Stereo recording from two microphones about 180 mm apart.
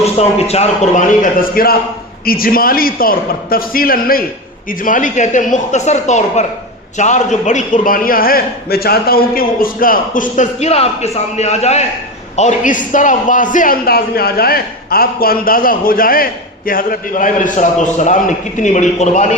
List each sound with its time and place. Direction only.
0.0 s a man's voice: 35° left (ahead or behind)